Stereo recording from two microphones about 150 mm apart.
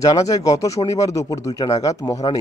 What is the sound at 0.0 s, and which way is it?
Speech, 25° left (ahead or behind).